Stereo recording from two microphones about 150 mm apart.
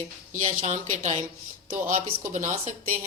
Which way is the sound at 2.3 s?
55° right (ahead or behind).